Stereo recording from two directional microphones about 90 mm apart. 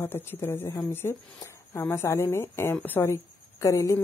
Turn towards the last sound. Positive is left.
turn(degrees=35)  # may be behind; listen again after turning